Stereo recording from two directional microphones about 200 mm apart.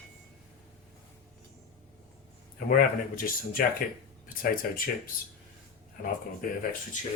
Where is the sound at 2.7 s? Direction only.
45° left (ahead or behind).